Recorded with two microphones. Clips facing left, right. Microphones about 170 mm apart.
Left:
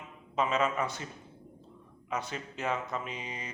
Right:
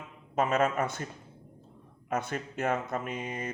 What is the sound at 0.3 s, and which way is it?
Speech, 50° right (ahead or behind).